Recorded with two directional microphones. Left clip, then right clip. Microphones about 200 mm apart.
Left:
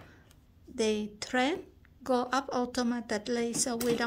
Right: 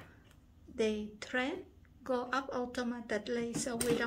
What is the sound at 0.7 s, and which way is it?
A woman's voice, 55° left (ahead or behind).